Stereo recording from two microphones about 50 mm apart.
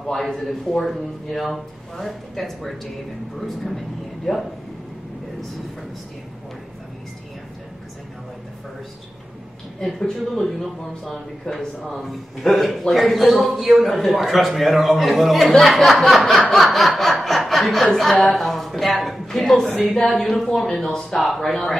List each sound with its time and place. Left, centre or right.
0.0 s a man's voice: centre
9.8 s a man's voice: centre
15.6 s snicker: centre
18.2 s a man's voice: centre